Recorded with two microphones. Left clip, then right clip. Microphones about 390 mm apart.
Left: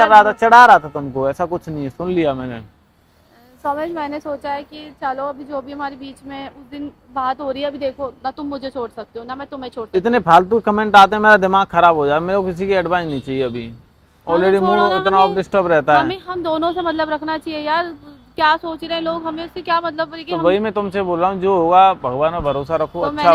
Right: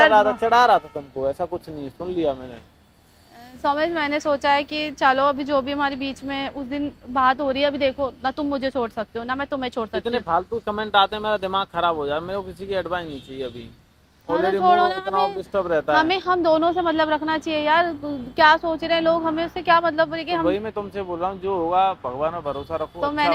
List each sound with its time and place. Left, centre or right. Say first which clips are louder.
0.1 s speech: left 8 dB; left
1.2 s speech: left 5 dB; left
3.6 s a woman's voice: even; centre
10.0 s speech: left 12 dB; left
14.3 s speech: left 7 dB; left
14.6 s a woman's voice: left 3 dB; centre
15.4 s speech: left 7 dB; left
16.0 s a woman's voice: right 3 dB; centre
20.4 s speech: left 7 dB; left